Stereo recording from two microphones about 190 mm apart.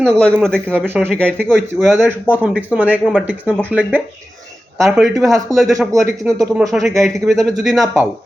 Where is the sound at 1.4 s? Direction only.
5° left (ahead or behind).